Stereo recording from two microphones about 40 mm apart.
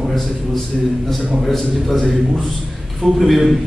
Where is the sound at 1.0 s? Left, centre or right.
Centre.